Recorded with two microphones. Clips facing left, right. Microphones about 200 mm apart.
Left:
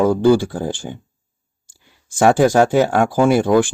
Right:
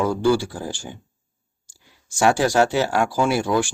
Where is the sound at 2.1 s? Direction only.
55° left (ahead or behind).